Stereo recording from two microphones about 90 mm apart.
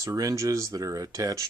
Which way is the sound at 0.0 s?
40° right (ahead or behind).